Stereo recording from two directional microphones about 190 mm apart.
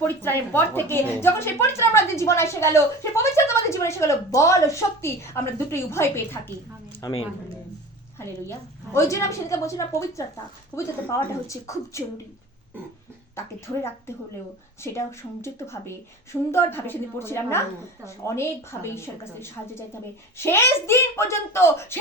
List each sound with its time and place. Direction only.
0.2 s a woman's voice: 10° left (ahead or behind)
8.2 s a woman's voice: 15° left (ahead or behind)
14.8 s a woman's voice: 15° left (ahead or behind)